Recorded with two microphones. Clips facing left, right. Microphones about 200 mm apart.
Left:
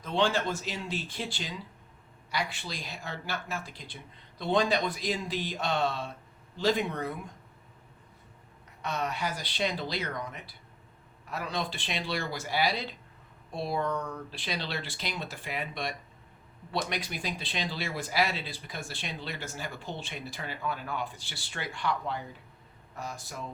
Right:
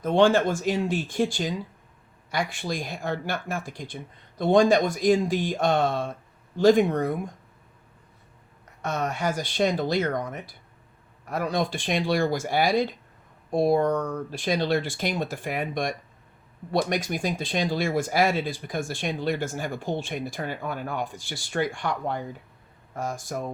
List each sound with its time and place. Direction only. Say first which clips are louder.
0.0 s speech: right 9 dB; 50° right (ahead or behind)
8.8 s speech: right 5 dB; 50° right (ahead or behind)